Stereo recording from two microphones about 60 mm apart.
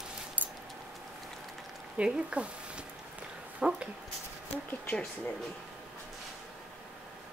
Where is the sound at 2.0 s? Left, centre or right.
Centre.